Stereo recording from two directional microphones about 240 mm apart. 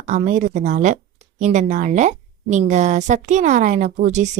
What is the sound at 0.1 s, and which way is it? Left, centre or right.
A woman's voice, right.